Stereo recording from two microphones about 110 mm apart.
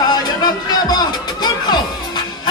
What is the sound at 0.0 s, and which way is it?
Music, 35° left (ahead or behind).